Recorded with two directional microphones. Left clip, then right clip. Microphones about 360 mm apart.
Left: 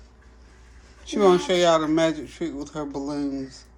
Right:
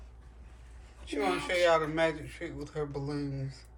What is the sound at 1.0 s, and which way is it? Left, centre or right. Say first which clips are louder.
Speech: left 12 dB; centre.